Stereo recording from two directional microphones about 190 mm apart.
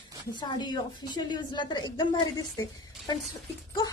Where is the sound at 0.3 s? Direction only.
25° left (ahead or behind).